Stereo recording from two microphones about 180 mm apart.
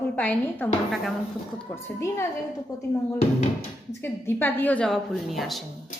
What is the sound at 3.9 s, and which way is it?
A woman's voice, 10° left (ahead or behind).